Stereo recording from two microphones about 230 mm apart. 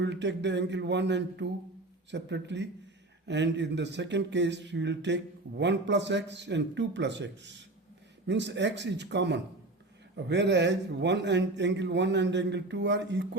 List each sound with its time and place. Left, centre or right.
0.0 s speech: right